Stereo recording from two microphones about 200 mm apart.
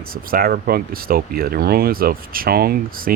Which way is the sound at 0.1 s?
45° right (ahead or behind).